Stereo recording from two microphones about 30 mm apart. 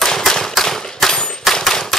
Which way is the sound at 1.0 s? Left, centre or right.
Centre.